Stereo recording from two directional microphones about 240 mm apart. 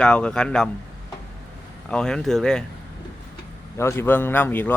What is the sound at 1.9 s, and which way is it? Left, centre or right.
Speech, centre.